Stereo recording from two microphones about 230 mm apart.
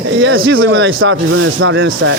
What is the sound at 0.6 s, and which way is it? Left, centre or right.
Speech, right.